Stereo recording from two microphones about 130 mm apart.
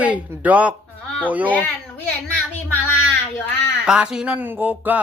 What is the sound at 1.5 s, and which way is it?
Speech, 10° left (ahead or behind).